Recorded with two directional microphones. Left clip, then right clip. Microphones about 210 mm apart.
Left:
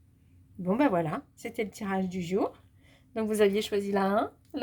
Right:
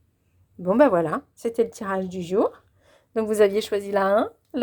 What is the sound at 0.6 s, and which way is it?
Speech, 25° right (ahead or behind).